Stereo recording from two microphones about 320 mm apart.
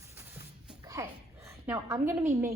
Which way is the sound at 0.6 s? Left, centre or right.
Centre.